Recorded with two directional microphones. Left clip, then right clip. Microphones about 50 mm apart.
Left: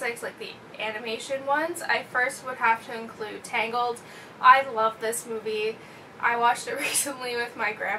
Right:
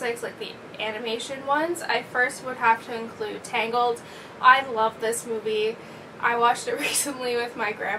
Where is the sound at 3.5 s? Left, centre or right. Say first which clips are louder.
Right 3 dB; centre.